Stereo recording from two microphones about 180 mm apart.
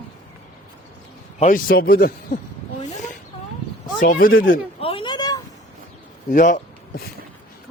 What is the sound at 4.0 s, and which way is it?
Speech, 50° left (ahead or behind).